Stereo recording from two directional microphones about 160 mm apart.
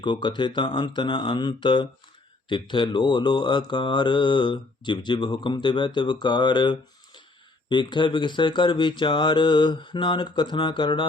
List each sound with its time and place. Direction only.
0.0 s speech: 30° left (ahead or behind)
2.5 s mantra: 30° left (ahead or behind)